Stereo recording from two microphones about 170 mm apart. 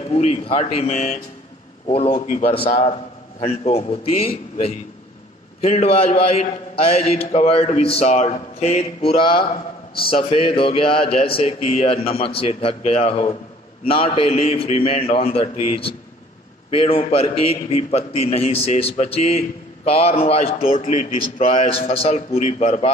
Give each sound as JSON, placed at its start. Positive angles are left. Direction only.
{"t": 0.1, "sound": "a man's voice", "side_deg": 35}
{"t": 2.2, "sound": "a man's voice", "side_deg": 50}
{"t": 2.5, "sound": "a man's voice", "side_deg": 35}
{"t": 5.6, "sound": "a man's voice", "side_deg": 40}